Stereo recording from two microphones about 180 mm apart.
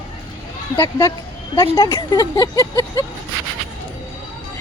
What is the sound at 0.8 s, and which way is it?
Speech, 15° left (ahead or behind).